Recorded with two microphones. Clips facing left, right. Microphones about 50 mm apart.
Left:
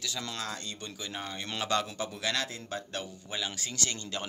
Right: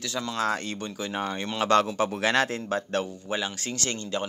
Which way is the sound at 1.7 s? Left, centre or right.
Right.